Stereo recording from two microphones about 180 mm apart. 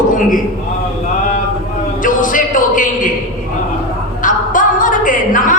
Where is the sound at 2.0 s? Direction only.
50° left (ahead or behind).